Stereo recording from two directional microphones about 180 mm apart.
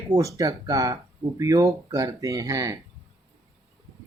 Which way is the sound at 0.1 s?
20° right (ahead or behind).